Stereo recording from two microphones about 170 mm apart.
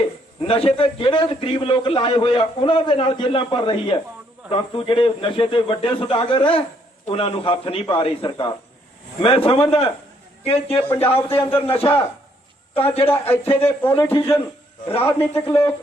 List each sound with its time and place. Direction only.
0.4 s a man's voice: 35° left (ahead or behind)
10.8 s a man's voice: 15° left (ahead or behind)